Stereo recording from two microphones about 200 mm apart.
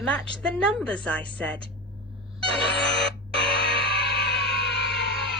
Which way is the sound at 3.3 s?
30° right (ahead or behind).